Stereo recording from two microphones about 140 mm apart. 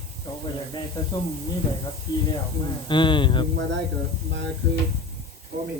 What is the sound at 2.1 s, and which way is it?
A man's voice, 30° left (ahead or behind).